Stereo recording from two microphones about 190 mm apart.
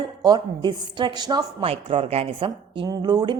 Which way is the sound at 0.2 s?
20° right (ahead or behind).